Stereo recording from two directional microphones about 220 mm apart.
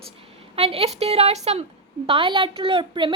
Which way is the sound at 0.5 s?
25° right (ahead or behind).